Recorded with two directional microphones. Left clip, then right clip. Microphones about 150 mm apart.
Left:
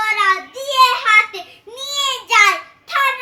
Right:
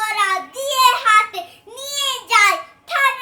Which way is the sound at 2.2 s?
25° right (ahead or behind).